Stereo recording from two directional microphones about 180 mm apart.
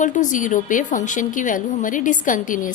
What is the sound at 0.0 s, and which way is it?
A woman's voice, 45° left (ahead or behind).